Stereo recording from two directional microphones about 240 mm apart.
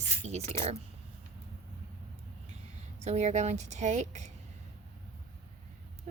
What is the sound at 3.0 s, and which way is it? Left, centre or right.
Speech, right.